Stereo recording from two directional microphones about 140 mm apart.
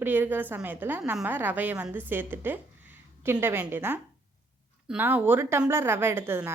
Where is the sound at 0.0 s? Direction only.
15° right (ahead or behind).